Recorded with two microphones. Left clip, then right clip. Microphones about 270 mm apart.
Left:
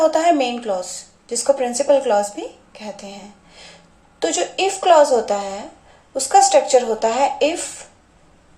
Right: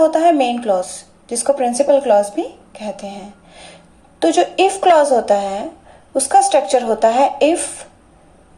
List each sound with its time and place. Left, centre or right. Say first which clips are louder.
0.0 s a woman's voice: right 3 dB; right